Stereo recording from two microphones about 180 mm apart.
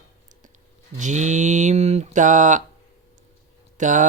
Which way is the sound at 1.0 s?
40° right (ahead or behind).